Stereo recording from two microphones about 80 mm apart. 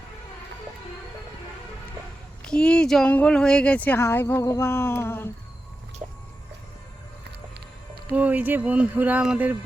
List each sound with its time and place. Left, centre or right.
2.4 s speech: centre
3.9 s speech: left
4.4 s a sound: left
8.1 s speech: centre